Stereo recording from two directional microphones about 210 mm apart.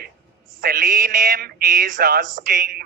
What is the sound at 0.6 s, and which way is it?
Speech, 40° right (ahead or behind).